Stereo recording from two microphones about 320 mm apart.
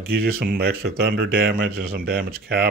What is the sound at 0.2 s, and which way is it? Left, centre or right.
Speech, right.